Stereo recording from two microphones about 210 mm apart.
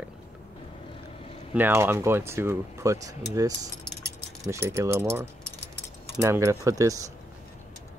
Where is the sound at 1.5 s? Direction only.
10° right (ahead or behind).